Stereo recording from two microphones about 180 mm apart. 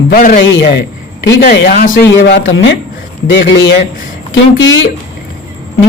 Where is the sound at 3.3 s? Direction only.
90° left.